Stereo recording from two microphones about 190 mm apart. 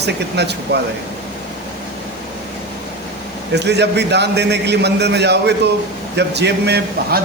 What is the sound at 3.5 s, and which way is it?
A man's voice, 65° right (ahead or behind).